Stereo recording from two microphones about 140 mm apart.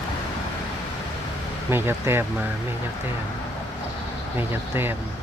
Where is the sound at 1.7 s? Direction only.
15° right (ahead or behind).